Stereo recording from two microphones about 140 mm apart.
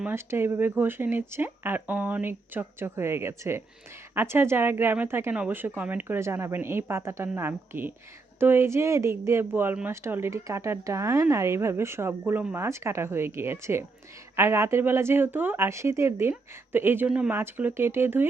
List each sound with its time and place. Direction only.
0.0 s speech: 15° right (ahead or behind)